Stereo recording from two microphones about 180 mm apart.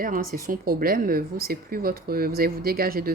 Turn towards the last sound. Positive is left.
turn(degrees=-55)  # may be behind; listen again after turning